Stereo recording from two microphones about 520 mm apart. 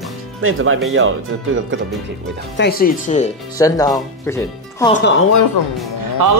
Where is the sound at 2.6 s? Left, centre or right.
Centre.